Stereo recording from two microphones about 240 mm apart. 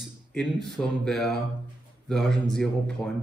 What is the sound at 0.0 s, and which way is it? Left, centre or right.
Speech, centre.